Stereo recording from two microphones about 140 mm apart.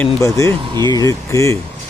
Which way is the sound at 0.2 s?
20° left (ahead or behind).